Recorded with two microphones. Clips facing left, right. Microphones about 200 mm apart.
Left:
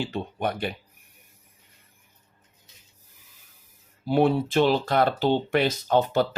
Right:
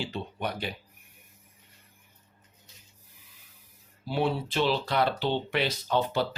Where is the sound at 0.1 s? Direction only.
50° left (ahead or behind).